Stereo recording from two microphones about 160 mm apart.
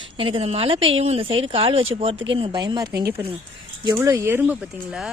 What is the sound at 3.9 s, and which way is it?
Speech, 15° right (ahead or behind).